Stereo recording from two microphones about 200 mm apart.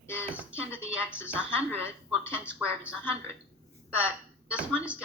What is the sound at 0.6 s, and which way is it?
A woman's voice, 5° right (ahead or behind).